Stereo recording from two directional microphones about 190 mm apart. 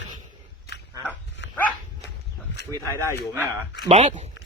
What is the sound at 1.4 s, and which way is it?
Dog, 65° left (ahead or behind).